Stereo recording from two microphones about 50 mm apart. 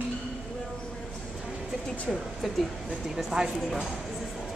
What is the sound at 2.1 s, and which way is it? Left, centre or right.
Speech, centre.